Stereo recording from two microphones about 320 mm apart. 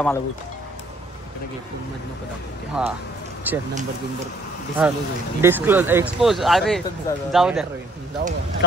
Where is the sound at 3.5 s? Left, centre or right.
Centre.